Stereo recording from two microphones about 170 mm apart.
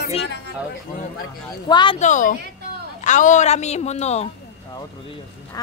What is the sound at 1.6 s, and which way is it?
Speech, 30° left (ahead or behind).